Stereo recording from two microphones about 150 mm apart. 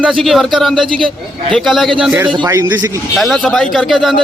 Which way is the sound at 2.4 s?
20° right (ahead or behind).